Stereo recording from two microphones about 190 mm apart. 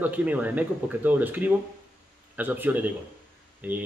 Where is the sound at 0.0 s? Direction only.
10° right (ahead or behind).